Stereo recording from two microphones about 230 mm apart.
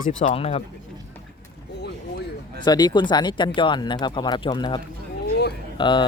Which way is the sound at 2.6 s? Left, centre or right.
Centre.